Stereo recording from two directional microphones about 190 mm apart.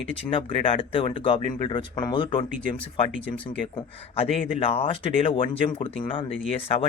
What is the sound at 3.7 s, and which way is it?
Speech, 30° left (ahead or behind).